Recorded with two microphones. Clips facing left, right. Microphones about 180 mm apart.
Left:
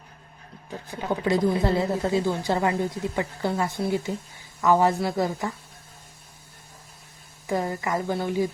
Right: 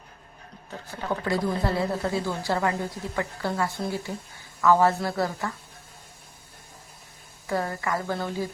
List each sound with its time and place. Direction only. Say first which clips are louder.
0.9 s a woman's voice: left 3 dB; 15° left (ahead or behind)
7.4 s a woman's voice: left 1 dB; 20° left (ahead or behind)